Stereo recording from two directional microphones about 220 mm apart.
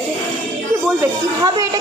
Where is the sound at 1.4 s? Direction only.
15° right (ahead or behind).